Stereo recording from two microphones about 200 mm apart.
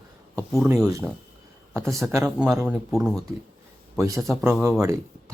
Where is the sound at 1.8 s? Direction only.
Centre (ahead or behind).